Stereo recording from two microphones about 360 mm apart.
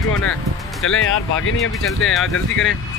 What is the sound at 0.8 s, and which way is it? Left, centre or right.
Speech, left.